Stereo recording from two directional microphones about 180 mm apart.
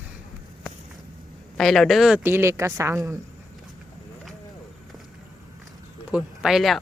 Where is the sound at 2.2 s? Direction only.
15° right (ahead or behind).